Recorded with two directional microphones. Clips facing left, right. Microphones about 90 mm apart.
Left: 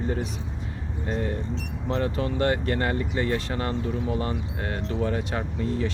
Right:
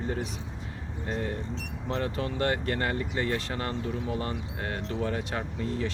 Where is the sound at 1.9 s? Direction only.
20° left (ahead or behind).